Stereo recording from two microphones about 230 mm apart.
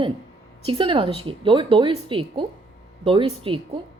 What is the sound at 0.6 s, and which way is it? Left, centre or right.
A woman's voice, right.